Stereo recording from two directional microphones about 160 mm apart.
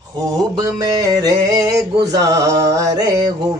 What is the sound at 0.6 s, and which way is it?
Male singing, 25° right (ahead or behind).